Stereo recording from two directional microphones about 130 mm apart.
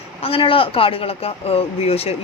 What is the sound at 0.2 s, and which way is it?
Speech, 45° left (ahead or behind).